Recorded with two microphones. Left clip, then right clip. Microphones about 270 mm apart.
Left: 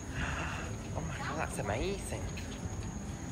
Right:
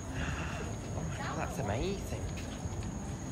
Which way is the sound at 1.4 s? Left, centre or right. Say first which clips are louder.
Left 1 dB; centre.